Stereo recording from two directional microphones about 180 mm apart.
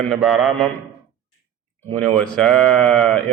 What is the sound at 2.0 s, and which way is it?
A man's voice, 5° left (ahead or behind).